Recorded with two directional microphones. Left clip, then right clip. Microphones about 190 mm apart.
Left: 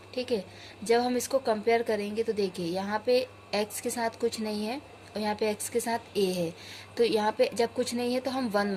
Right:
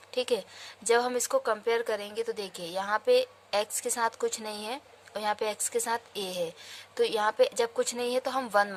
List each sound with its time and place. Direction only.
0.1 s a woman's voice: 50° right (ahead or behind)